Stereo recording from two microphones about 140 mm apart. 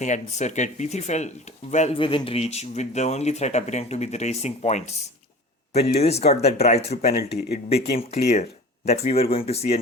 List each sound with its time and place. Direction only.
0.0 s speech: 55° left (ahead or behind)
2.0 s speech: 40° left (ahead or behind); by 4.9 s 55° left (ahead or behind)
6.0 s speech: 50° left (ahead or behind)
7.1 s speech: 90° left
7.7 s speech: 50° left (ahead or behind)